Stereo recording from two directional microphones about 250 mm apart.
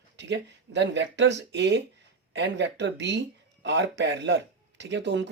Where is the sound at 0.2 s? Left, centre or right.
Right.